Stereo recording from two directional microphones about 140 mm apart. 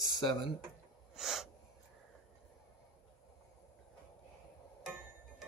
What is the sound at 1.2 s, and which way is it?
Sneeze, centre (ahead or behind).